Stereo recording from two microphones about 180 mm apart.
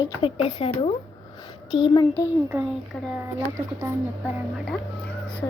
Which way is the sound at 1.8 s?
25° left (ahead or behind).